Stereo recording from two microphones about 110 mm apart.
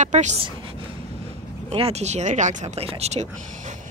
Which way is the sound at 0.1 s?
90° right.